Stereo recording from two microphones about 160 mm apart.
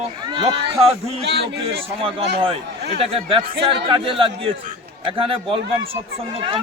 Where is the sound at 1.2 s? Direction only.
90° right.